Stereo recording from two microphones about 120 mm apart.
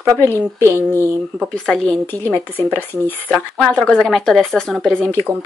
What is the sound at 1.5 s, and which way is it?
Speech, 5° left (ahead or behind).